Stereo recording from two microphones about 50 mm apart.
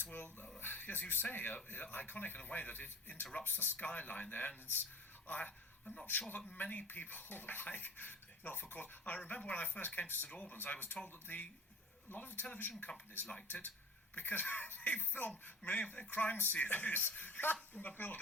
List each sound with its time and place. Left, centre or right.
0.0 s speech: left
3.8 s speech: left
6.1 s speech: left
10.2 s speech: left
10.5 s speech: left
12.1 s speech: left